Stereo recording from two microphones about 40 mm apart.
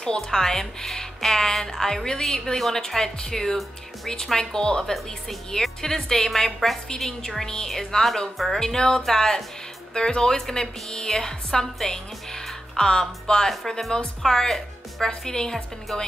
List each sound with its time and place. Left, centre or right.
0.0 s speech: centre
8.5 s speech: centre